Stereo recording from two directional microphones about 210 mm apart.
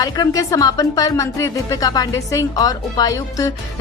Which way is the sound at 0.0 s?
15° left (ahead or behind).